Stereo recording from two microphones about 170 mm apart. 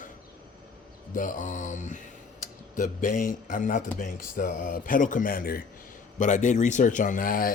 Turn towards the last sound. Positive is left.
turn(degrees=55)  # may be behind; listen again after turning